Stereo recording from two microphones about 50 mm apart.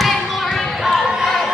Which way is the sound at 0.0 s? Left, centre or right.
Centre.